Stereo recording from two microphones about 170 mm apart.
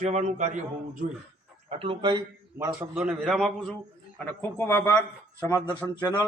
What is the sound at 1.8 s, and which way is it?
Speech, 30° right (ahead or behind).